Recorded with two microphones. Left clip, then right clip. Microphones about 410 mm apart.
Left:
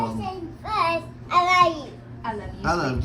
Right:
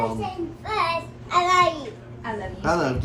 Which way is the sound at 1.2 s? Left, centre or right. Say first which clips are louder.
Left 1 dB; centre.